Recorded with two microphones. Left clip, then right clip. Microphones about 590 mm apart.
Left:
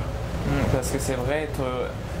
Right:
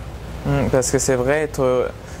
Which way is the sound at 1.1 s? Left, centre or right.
Right.